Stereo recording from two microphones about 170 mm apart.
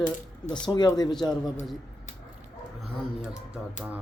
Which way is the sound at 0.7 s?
25° left (ahead or behind).